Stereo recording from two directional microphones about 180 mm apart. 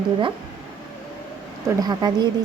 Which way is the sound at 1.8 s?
20° right (ahead or behind).